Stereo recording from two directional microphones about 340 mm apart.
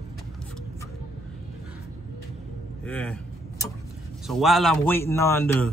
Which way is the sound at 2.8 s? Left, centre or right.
Centre.